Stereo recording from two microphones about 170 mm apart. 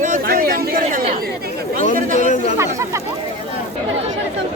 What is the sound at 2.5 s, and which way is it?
Speech, 15° right (ahead or behind).